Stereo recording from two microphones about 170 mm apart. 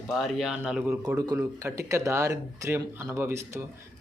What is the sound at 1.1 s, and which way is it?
Speech, 15° right (ahead or behind).